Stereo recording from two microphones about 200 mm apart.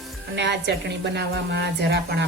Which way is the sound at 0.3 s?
60° right (ahead or behind).